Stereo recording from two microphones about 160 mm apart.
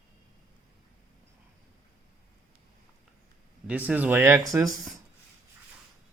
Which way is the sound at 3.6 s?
10° right (ahead or behind).